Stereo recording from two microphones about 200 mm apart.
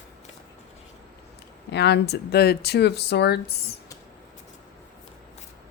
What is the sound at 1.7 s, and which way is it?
Speech, 55° left (ahead or behind).